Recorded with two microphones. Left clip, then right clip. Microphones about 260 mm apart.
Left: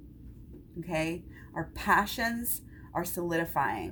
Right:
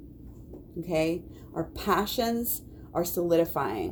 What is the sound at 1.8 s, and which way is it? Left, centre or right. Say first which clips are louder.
Speech: left 1 dB; left.